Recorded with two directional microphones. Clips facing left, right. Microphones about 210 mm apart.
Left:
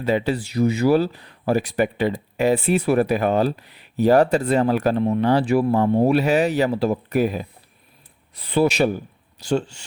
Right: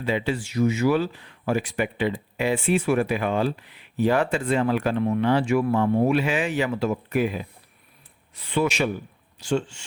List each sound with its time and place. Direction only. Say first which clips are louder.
0.0 s speech: left 4 dB; 40° left (ahead or behind)